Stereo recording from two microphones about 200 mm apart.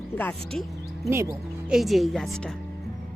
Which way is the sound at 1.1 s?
15° right (ahead or behind).